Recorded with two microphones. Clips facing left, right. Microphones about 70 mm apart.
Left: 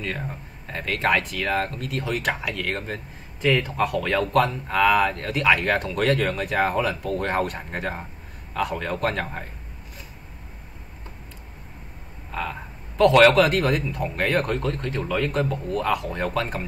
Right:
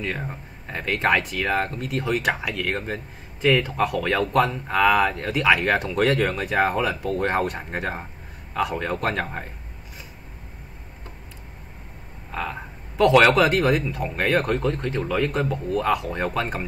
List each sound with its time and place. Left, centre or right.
0.0 s speech: centre
12.3 s speech: centre